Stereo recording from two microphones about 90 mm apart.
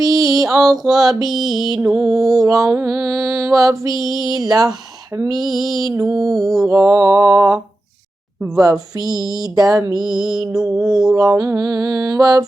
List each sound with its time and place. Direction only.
0.0 s mantra: 40° right (ahead or behind)
0.5 s music: 40° right (ahead or behind)
0.9 s music: 5° right (ahead or behind)
2.4 s music: 40° right (ahead or behind)
5.1 s a sound: 45° right (ahead or behind)
6.1 s music: 40° right (ahead or behind)
6.4 s music: centre (ahead or behind)
6.7 s music: 35° right (ahead or behind)
8.5 s a sound: 45° right (ahead or behind)
10.0 s music: 5° right (ahead or behind)
10.5 s mantra: 5° right (ahead or behind)
11.1 s a sound: 45° right (ahead or behind)